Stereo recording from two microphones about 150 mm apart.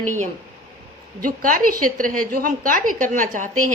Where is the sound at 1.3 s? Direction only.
65° right (ahead or behind).